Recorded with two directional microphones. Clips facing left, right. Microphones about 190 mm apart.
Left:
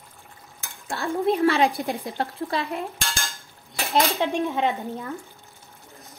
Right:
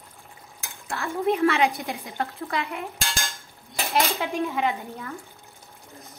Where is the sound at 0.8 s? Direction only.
35° left (ahead or behind).